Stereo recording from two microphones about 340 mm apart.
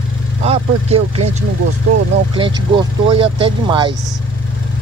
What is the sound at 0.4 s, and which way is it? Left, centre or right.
Speech, centre.